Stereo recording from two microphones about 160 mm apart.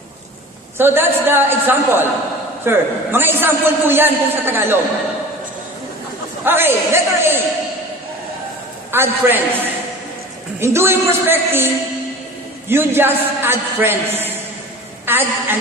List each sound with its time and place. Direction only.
0.8 s a man's voice: 15° right (ahead or behind)
6.4 s a man's voice: 15° right (ahead or behind)
8.9 s a man's voice: 15° right (ahead or behind)
10.6 s a man's voice: 15° right (ahead or behind)